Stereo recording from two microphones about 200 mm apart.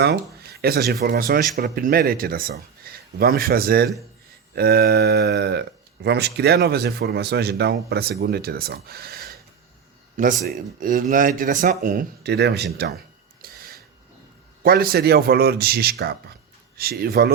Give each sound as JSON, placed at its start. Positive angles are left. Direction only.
{"t": 0.0, "sound": "speech", "side_deg": -55}
{"t": 13.4, "sound": "a sound", "side_deg": -50}
{"t": 14.6, "sound": "speech", "side_deg": -50}